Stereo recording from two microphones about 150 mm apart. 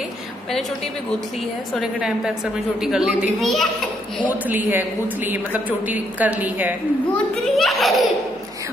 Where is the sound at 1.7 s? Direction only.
5° right (ahead or behind).